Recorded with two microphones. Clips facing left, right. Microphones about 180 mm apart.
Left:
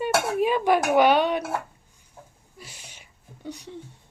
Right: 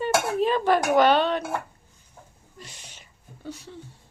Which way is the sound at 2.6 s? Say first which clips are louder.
Even; 10° left (ahead or behind).